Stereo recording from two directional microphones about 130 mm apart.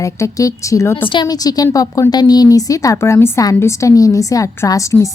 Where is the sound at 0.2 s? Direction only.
25° left (ahead or behind).